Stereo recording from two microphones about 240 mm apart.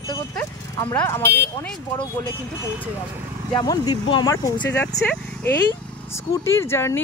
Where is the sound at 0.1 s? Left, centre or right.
Centre.